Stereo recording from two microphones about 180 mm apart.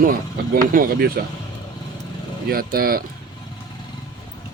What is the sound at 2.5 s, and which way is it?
Speech, 55° right (ahead or behind).